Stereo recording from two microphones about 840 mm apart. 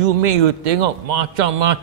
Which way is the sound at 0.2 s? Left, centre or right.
Right.